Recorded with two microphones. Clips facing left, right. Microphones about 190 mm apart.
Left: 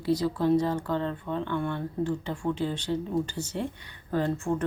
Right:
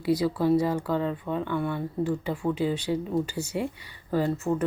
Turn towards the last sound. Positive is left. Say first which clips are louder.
# right 2 dB
turn(degrees=-5)  # may be behind; listen again after turning